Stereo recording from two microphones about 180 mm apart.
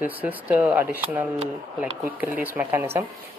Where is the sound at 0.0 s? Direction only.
10° right (ahead or behind).